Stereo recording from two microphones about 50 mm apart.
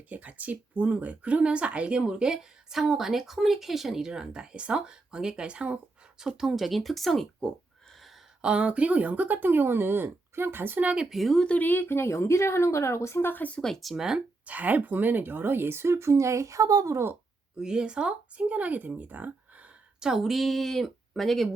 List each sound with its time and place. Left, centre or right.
0.1 s speech: right
6.1 s speech: centre
8.4 s speech: right
10.8 s speech: right
11.1 s speech: centre
11.4 s a woman's voice: left
13.2 s speech: left
13.6 s speech: centre
13.9 s speech: centre
14.4 s speech: right
17.6 s speech: centre; by 19.3 s right
20.0 s speech: centre